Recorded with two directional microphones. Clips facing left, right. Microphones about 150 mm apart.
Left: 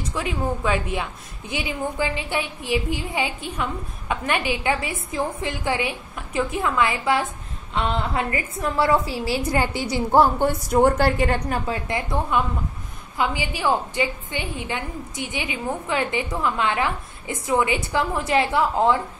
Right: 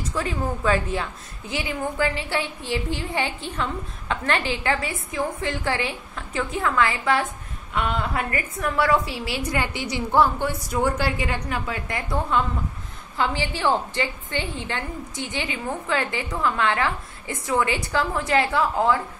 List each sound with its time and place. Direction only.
0.1 s a woman's voice: 10° left (ahead or behind); by 12.0 s 30° left (ahead or behind)
13.2 s a woman's voice: 15° left (ahead or behind)